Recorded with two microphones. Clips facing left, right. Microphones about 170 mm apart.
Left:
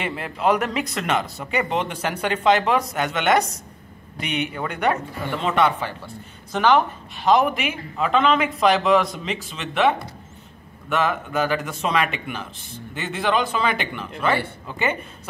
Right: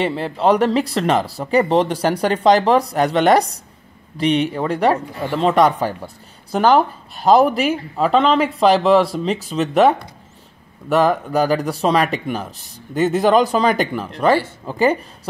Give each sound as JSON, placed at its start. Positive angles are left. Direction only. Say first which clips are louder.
{"t": 0.0, "sound": "speech", "louder": "right 6 dB", "side_deg": -30}